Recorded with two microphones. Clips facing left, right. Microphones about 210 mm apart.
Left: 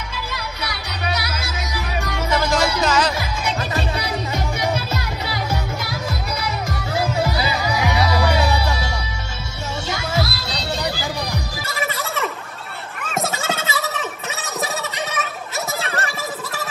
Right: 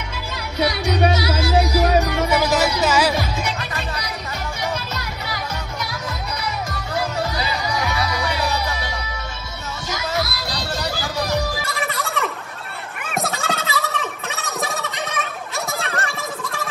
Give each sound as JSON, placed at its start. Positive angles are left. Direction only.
{"t": 1.1, "sound": "music", "side_deg": -30}
{"t": 2.3, "sound": "music", "side_deg": -5}
{"t": 9.8, "sound": "music", "side_deg": 30}
{"t": 11.6, "sound": "music", "side_deg": 0}
{"t": 13.2, "sound": "gobble", "side_deg": 0}
{"t": 15.8, "sound": "a sound", "side_deg": 0}